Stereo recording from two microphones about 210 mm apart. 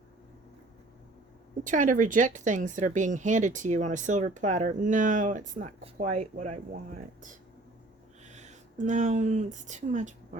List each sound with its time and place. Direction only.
1.6 s speech: 35° right (ahead or behind)
8.2 s speech: 35° right (ahead or behind)